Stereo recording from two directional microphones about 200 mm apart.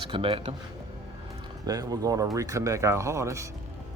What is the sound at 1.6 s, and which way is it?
Speech, 20° right (ahead or behind).